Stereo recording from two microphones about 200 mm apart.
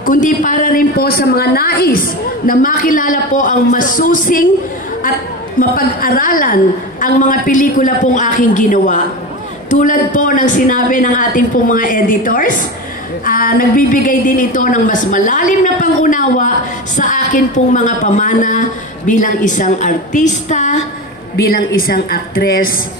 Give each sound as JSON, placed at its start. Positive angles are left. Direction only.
{"t": 0.0, "sound": "a woman's voice", "side_deg": 40}
{"t": 5.6, "sound": "a woman's voice", "side_deg": 45}
{"t": 21.5, "sound": "a woman's voice", "side_deg": 45}